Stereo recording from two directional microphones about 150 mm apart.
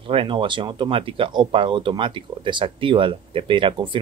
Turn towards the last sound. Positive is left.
turn(degrees=-35)  # may be behind; listen again after turning